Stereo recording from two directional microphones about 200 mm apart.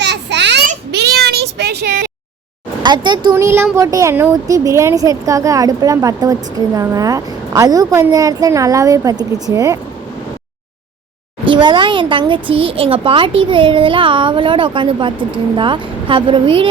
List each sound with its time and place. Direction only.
0.0 s a sound: 60° right (ahead or behind)
0.9 s cat: 55° right (ahead or behind)
2.8 s a child's voice: 20° right (ahead or behind)
11.4 s a child's voice: 25° right (ahead or behind)